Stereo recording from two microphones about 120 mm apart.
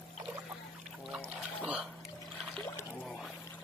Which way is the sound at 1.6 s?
10° right (ahead or behind).